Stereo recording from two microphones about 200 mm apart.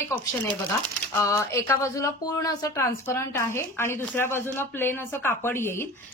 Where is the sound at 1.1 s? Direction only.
15° left (ahead or behind).